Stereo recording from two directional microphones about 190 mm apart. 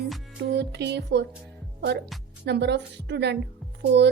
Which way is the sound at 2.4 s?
65° right (ahead or behind).